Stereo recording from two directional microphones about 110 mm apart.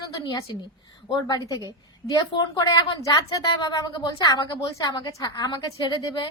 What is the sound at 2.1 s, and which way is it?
A woman's voice, 40° left (ahead or behind).